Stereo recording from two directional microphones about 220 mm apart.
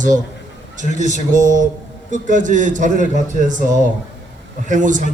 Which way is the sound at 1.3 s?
35° right (ahead or behind).